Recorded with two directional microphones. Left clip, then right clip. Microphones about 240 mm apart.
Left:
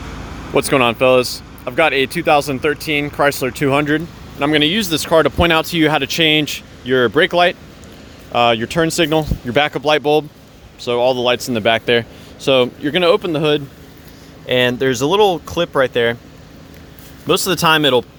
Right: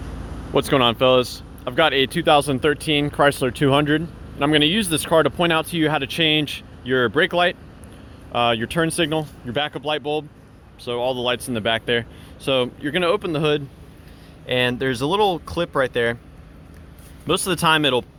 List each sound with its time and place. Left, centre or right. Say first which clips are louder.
0.5 s speech: left 4 dB; centre
17.2 s speech: left 5 dB; centre